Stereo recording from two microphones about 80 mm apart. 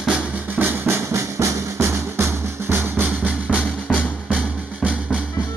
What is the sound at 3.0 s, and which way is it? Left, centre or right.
Music, centre.